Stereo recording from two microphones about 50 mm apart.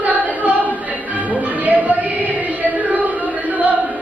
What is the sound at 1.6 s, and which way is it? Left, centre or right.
Music, right.